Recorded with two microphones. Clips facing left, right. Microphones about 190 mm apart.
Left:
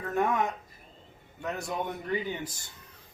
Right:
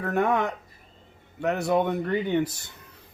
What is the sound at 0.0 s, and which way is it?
Speech, 65° right (ahead or behind).